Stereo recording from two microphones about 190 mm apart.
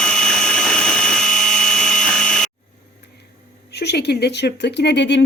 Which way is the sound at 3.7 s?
60° left (ahead or behind).